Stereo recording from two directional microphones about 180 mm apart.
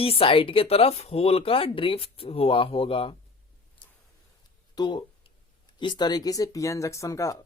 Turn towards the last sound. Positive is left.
turn(degrees=15)  # may be behind; listen again after turning